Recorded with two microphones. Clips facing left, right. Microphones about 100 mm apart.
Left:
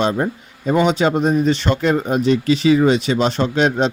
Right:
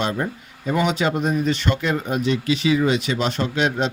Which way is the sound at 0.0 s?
25° left (ahead or behind).